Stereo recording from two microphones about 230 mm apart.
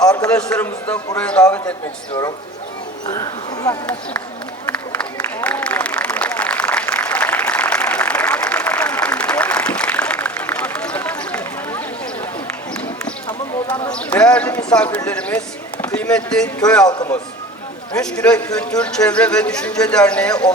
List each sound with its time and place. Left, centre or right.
0.0 s a sound: centre
0.3 s a man's voice: centre
3.1 s speech: centre
4.6 s a sound: centre
5.4 s applause: centre
13.9 s clip-clop: centre
14.9 s speech: centre
16.8 s speech: centre
17.9 s a man's voice: centre